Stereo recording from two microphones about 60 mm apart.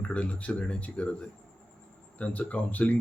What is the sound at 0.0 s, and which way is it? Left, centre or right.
Speech, left.